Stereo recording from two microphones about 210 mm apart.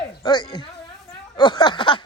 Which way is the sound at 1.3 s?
20° left (ahead or behind).